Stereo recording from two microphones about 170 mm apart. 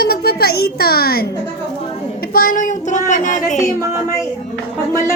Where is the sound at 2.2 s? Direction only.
60° left (ahead or behind).